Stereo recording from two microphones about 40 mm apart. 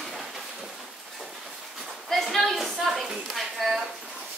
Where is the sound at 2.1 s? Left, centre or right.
Centre.